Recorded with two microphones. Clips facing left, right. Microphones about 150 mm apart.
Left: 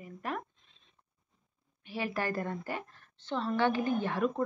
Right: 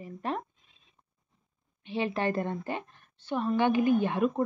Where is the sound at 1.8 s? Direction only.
25° right (ahead or behind).